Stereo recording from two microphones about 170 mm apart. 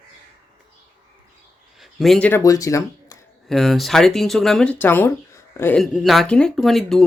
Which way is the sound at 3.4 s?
Centre (ahead or behind).